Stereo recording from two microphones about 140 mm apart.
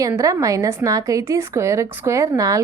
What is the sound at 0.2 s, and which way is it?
A woman's voice, 20° right (ahead or behind).